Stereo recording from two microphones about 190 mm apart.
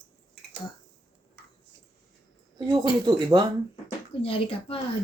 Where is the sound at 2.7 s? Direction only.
20° right (ahead or behind).